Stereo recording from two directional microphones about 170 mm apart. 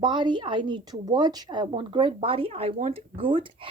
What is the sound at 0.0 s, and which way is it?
Speech, 25° right (ahead or behind).